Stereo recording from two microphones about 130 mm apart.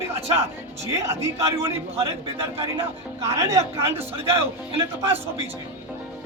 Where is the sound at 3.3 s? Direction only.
20° right (ahead or behind).